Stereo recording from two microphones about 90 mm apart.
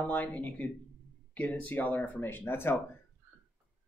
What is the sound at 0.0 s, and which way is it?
Speech, 15° left (ahead or behind).